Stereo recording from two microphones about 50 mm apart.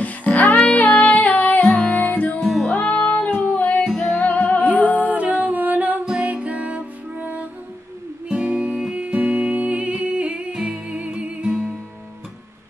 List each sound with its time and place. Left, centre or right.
0.0 s music: left
2.4 s music: centre
2.7 s music: left
5.1 s music: right
8.3 s music: centre